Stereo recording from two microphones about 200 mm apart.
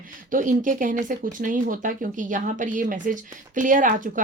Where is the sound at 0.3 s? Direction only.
40° right (ahead or behind).